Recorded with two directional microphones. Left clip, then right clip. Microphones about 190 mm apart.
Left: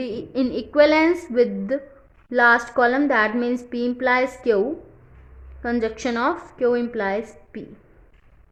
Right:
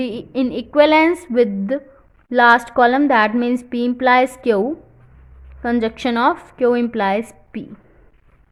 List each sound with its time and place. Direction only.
0.0 s a woman's voice: 30° right (ahead or behind)